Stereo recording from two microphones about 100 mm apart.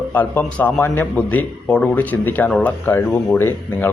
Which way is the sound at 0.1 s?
15° left (ahead or behind).